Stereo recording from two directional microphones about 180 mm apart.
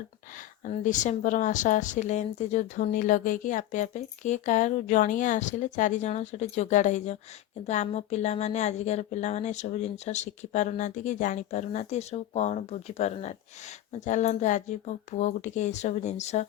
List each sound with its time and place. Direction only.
0.6 s a woman's voice: 45° left (ahead or behind)